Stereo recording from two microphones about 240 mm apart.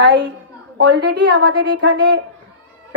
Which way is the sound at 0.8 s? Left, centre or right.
Right.